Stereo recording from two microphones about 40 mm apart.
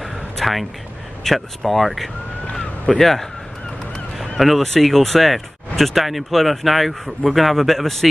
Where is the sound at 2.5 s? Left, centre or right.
Centre.